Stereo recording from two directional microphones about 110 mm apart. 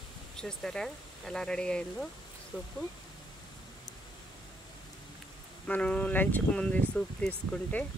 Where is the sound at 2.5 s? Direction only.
10° right (ahead or behind).